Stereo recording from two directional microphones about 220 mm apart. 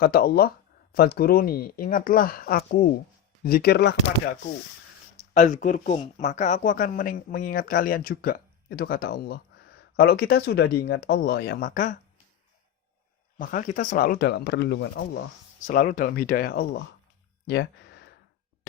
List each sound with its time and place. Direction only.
0.0 s speech: 45° left (ahead or behind)
5.3 s speech: 35° left (ahead or behind)
13.4 s speech: 35° left (ahead or behind)
15.6 s speech: 40° left (ahead or behind)
17.4 s a sound: 50° left (ahead or behind)